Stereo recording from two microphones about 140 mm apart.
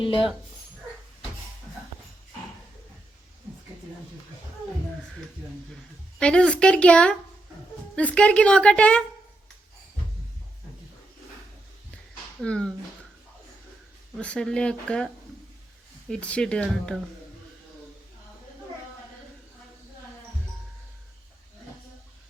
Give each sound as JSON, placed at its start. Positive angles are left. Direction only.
{"t": 0.0, "sound": "speech", "side_deg": 40}
{"t": 6.1, "sound": "a woman's voice", "side_deg": 5}
{"t": 12.4, "sound": "a woman's voice", "side_deg": 5}
{"t": 14.2, "sound": "a woman's voice", "side_deg": 5}